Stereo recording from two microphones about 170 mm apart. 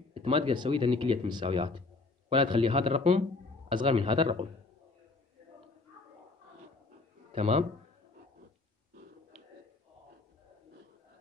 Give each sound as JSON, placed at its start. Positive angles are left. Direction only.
{"t": 0.1, "sound": "a man's voice", "side_deg": -30}
{"t": 7.3, "sound": "a man's voice", "side_deg": -35}